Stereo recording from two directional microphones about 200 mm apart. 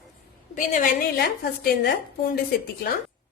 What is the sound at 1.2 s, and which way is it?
Speech, 50° left (ahead or behind).